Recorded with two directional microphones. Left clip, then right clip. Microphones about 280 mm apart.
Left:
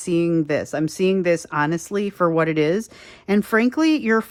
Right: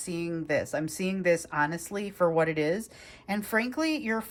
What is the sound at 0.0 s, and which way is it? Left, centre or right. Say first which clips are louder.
Speech: left 13 dB; left.